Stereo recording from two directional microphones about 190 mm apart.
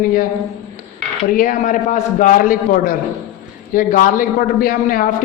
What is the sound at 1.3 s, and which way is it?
Speech, 45° left (ahead or behind).